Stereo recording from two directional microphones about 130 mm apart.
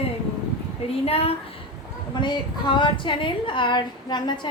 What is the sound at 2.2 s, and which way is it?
A woman's voice, 35° left (ahead or behind).